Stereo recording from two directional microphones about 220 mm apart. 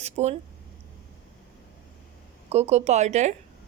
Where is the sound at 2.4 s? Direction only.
30° right (ahead or behind).